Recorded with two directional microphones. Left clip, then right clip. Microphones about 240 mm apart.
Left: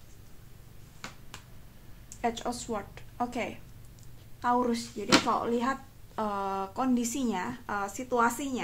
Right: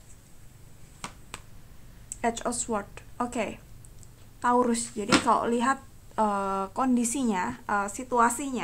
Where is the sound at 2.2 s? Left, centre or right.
Right.